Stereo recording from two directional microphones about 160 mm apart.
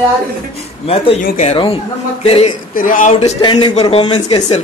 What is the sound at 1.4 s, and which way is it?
A man's voice, 40° left (ahead or behind).